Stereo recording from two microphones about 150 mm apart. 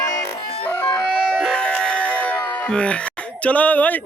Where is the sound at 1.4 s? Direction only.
5° left (ahead or behind).